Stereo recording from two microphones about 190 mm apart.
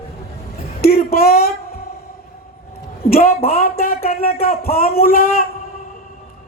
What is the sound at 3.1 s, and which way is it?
Speech, 50° left (ahead or behind).